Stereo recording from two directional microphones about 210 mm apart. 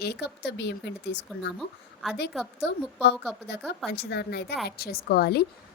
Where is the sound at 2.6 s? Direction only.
55° left (ahead or behind).